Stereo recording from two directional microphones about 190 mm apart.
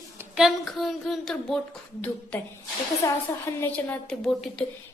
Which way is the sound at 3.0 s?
15° left (ahead or behind).